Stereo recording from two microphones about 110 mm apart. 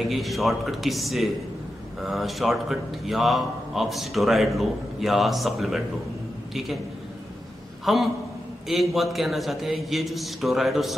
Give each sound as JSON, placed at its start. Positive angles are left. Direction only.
{"t": 0.0, "sound": "a man's voice", "side_deg": 0}
{"t": 7.8, "sound": "a man's voice", "side_deg": 0}